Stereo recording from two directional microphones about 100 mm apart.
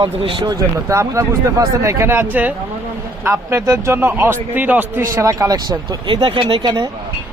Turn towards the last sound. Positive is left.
turn(degrees=-45)  # may be behind; listen again after turning